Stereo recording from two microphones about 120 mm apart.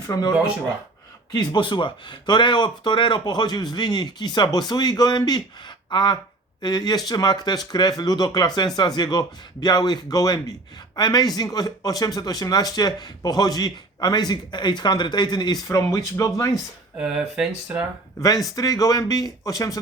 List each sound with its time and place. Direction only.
0.1 s speech: 35° left (ahead or behind)
17.0 s speech: 5° right (ahead or behind)
18.5 s speech: 30° left (ahead or behind)